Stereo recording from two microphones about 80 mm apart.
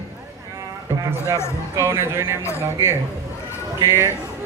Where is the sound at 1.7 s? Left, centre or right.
Right.